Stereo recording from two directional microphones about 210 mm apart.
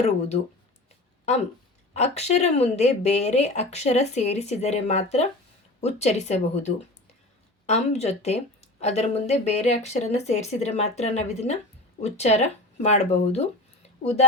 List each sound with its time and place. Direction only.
1.9 s speech: 30° left (ahead or behind)